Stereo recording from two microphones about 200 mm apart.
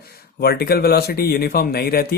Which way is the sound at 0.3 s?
50° left (ahead or behind).